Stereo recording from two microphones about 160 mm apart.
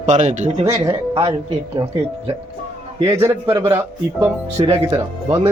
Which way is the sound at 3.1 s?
20° right (ahead or behind).